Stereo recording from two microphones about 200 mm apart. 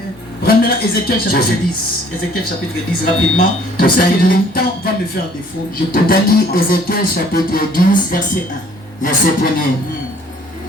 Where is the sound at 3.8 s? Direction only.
45° left (ahead or behind).